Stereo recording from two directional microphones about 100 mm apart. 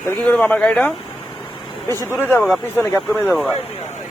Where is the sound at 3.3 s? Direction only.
Centre (ahead or behind).